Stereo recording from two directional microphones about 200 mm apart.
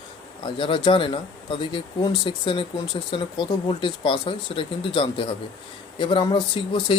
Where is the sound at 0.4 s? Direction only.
25° left (ahead or behind).